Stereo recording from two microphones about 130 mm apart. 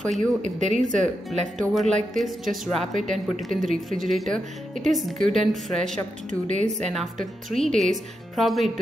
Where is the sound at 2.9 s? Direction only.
70° right (ahead or behind).